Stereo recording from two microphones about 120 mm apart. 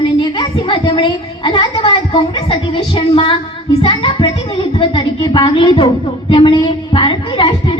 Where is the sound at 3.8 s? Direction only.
50° left (ahead or behind).